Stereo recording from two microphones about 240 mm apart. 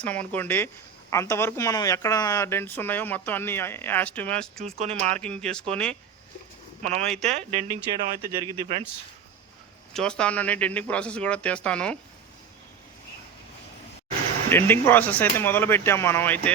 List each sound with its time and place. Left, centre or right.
0.0 s speech: centre
4.6 s speech: right
5.2 s speech: centre
6.8 s speech: right
9.9 s speech: centre
14.5 s speech: centre